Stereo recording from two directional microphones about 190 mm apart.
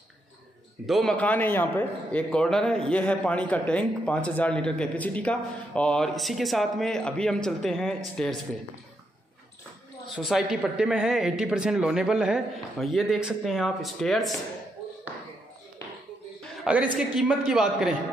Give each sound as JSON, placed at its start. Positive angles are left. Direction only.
{"t": 0.8, "sound": "a man's voice", "side_deg": 0}
{"t": 10.1, "sound": "a man's voice", "side_deg": 0}
{"t": 16.6, "sound": "a woman's voice", "side_deg": -5}